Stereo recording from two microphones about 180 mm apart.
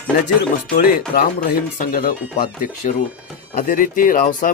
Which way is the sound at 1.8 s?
50° left (ahead or behind).